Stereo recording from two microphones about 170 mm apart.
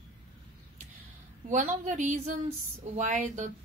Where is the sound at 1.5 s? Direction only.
45° right (ahead or behind).